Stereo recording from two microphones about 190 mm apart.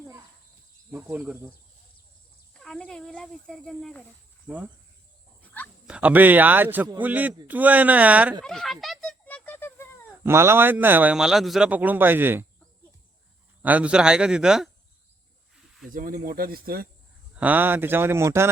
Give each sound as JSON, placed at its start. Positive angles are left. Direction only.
{"t": 0.9, "sound": "a man's voice", "side_deg": -10}
{"t": 2.5, "sound": "speech", "side_deg": 5}
{"t": 5.6, "sound": "speech", "side_deg": 10}
{"t": 5.9, "sound": "a man's voice", "side_deg": -10}
{"t": 8.4, "sound": "goat", "side_deg": 0}
{"t": 10.2, "sound": "a man's voice", "side_deg": -10}
{"t": 13.6, "sound": "speech", "side_deg": -10}
{"t": 15.9, "sound": "speech", "side_deg": -45}
{"t": 17.3, "sound": "a man's voice", "side_deg": -10}